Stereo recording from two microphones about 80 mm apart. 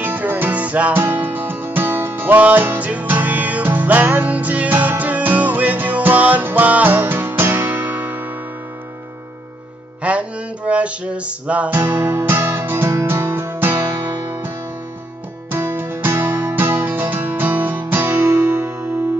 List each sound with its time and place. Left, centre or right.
0.0 s music: right
0.9 s music: right
10.0 s music: centre
11.8 s music: right
15.5 s music: right